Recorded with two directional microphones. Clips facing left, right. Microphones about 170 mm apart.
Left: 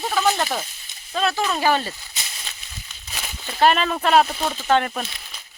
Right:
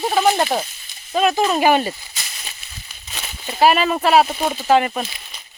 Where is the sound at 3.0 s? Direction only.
Centre (ahead or behind).